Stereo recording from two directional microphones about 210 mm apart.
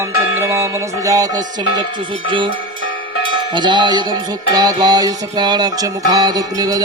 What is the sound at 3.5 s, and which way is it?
Music, 20° right (ahead or behind).